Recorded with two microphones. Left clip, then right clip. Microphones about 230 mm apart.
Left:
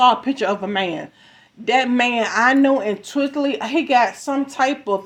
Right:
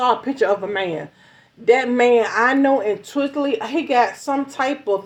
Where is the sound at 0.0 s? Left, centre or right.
Left.